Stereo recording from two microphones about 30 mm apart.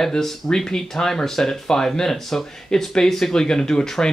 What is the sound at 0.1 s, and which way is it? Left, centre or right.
Speech, centre.